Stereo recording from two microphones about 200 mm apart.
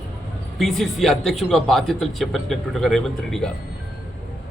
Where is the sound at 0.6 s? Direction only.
Centre (ahead or behind).